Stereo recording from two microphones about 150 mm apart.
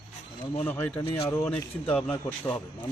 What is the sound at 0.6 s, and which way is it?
Speech, 10° left (ahead or behind).